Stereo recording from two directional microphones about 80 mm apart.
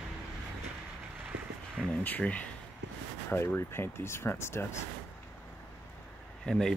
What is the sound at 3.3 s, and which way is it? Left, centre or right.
Speech, left.